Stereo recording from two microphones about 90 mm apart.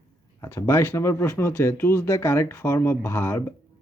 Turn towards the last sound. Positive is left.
turn(degrees=25)  # may be behind; listen again after turning